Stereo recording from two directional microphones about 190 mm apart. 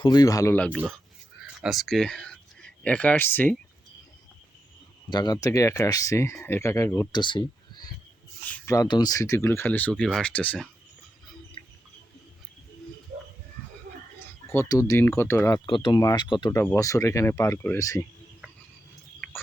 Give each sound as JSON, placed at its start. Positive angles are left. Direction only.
{"t": 0.0, "sound": "speech", "side_deg": 20}
{"t": 5.0, "sound": "speech", "side_deg": 20}
{"t": 7.2, "sound": "a sound", "side_deg": 25}
{"t": 8.4, "sound": "speech", "side_deg": 10}
{"t": 14.4, "sound": "speech", "side_deg": 15}
{"t": 15.6, "sound": "speech", "side_deg": 25}